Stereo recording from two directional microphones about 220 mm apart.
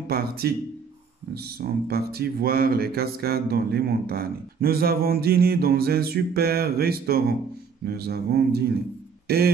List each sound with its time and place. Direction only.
0.1 s speech: 45° right (ahead or behind)